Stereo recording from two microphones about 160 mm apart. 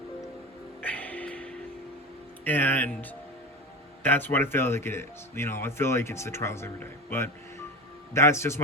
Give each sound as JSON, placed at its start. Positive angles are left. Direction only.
{"t": 0.8, "sound": "music", "side_deg": 10}
{"t": 2.4, "sound": "speech", "side_deg": 10}